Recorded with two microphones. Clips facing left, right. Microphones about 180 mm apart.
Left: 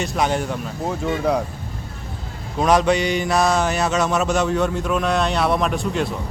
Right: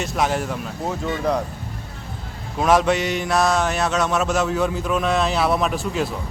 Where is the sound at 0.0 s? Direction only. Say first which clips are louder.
Left 1 dB; centre (ahead or behind).